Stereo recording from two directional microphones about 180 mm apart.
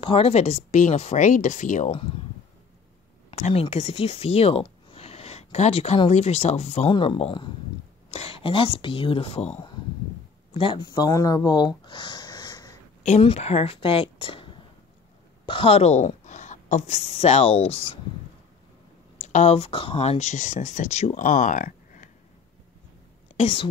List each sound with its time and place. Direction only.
0.0 s speech: 35° left (ahead or behind)
3.3 s speech: 35° left (ahead or behind); by 12.7 s 20° left (ahead or behind)
13.0 s a woman's voice: 35° left (ahead or behind)
19.2 s speech: 35° left (ahead or behind)
23.3 s a woman's voice: 30° left (ahead or behind)